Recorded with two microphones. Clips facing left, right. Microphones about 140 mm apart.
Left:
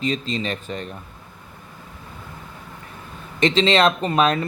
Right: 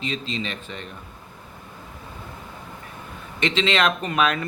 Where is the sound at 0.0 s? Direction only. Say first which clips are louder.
Left 5 dB; 40° left (ahead or behind).